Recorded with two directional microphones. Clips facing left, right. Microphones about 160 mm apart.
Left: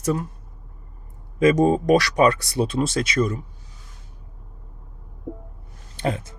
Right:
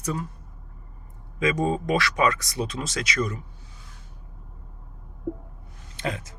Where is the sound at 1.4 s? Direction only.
40° left (ahead or behind).